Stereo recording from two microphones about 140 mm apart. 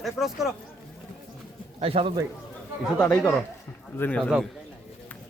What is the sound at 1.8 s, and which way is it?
Speech, 45° right (ahead or behind).